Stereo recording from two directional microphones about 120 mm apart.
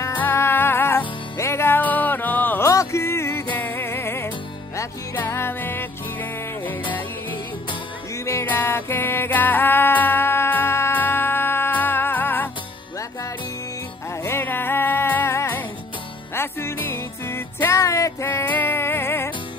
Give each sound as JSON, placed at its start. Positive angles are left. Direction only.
{"t": 0.0, "sound": "music", "side_deg": 15}
{"t": 2.7, "sound": "music", "side_deg": 25}
{"t": 8.3, "sound": "music", "side_deg": 20}
{"t": 14.2, "sound": "music", "side_deg": 20}